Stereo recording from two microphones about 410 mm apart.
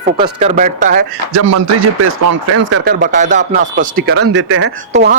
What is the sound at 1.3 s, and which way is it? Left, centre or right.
Speech, right.